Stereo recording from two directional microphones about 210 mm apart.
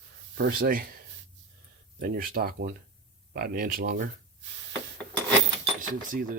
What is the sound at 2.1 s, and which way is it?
Speech, 45° right (ahead or behind).